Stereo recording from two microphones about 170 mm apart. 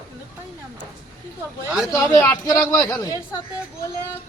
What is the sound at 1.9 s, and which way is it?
Speech, 20° left (ahead or behind).